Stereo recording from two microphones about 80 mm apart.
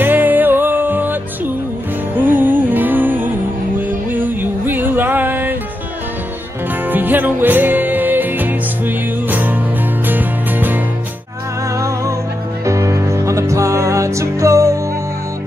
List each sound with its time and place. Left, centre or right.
0.0 s music: right
6.9 s music: right
11.7 s music: right